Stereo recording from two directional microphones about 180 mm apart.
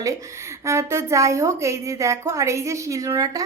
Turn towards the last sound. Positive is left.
turn(degrees=-20)  # may be behind; listen again after turning